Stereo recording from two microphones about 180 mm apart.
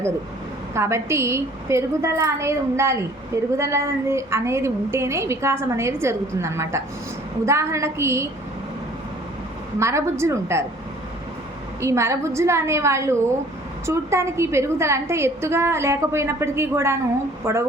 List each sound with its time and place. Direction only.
0.7 s a woman's voice: 15° right (ahead or behind)
9.7 s a woman's voice: 15° right (ahead or behind)
11.8 s a woman's voice: 15° right (ahead or behind)